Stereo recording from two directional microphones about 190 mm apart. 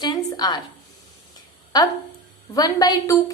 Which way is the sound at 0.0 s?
20° left (ahead or behind).